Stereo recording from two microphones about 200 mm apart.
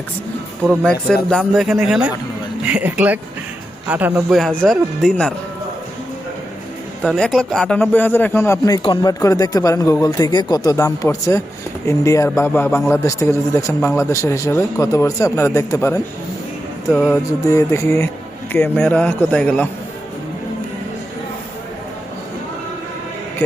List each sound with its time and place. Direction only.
0.7 s speech: 5° left (ahead or behind)
7.0 s speech: centre (ahead or behind)